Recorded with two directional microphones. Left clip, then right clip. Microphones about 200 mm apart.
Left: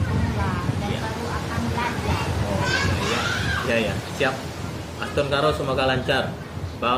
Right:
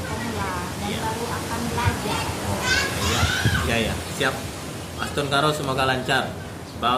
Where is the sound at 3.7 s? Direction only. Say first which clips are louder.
Left 1 dB; 15° right (ahead or behind).